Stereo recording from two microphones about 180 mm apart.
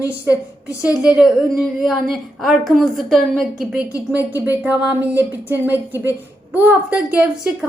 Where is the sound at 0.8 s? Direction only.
5° right (ahead or behind).